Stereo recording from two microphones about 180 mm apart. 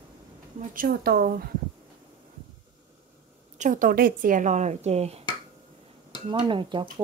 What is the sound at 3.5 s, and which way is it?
Speech, 45° right (ahead or behind).